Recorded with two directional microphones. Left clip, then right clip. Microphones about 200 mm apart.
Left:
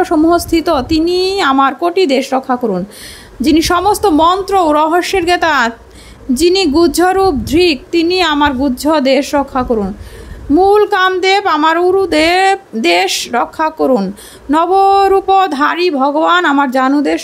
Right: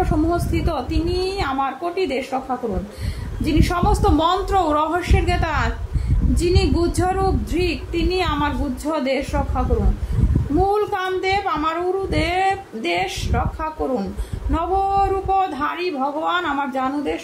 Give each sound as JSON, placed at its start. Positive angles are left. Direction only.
{"t": 0.0, "sound": "speech", "side_deg": 50}
{"t": 3.4, "sound": "speech", "side_deg": 50}